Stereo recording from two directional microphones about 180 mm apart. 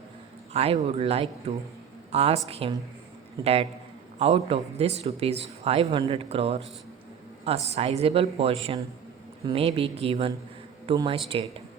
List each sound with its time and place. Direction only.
0.5 s speech: 35° right (ahead or behind)